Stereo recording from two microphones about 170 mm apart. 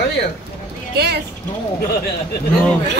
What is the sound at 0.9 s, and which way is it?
Speech, 75° right (ahead or behind).